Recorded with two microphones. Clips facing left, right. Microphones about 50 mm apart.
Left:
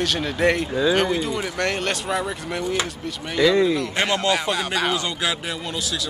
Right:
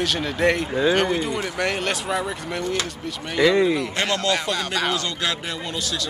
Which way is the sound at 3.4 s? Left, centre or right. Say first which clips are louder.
Even; centre.